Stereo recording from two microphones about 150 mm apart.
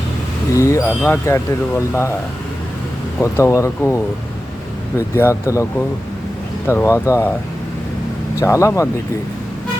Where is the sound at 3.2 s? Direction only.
20° left (ahead or behind).